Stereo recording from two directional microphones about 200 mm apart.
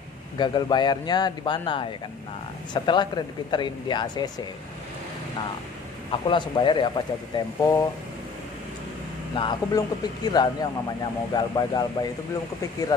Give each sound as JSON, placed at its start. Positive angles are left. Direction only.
{"t": 0.4, "sound": "speech", "side_deg": 20}
{"t": 6.2, "sound": "speech", "side_deg": 25}
{"t": 9.3, "sound": "speech", "side_deg": 25}